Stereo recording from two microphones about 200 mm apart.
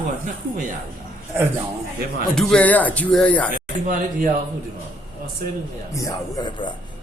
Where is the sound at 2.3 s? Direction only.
5° left (ahead or behind).